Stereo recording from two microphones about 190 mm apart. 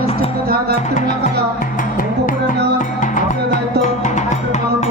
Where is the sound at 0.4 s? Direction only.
55° right (ahead or behind).